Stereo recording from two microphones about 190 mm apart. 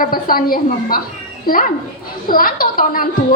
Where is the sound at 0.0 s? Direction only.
50° left (ahead or behind).